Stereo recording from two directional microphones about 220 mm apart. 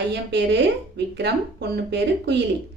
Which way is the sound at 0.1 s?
50° right (ahead or behind).